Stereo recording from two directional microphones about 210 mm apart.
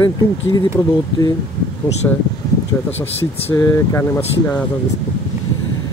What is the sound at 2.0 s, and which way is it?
Speech, 10° left (ahead or behind).